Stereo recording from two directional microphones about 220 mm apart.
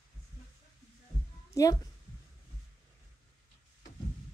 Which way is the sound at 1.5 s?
15° left (ahead or behind).